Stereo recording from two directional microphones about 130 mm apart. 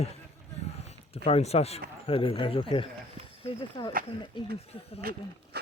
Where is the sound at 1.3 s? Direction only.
50° left (ahead or behind); by 3.9 s 35° left (ahead or behind).